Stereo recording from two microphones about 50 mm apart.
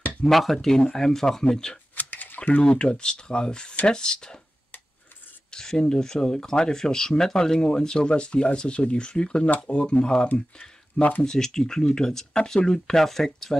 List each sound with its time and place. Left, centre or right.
0.2 s speech: centre
2.0 s speech: left; by 4.4 s centre
5.5 s speech: centre
11.0 s speech: left
11.2 s speech: centre